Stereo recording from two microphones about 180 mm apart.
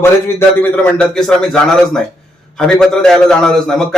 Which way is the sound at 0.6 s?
5° left (ahead or behind).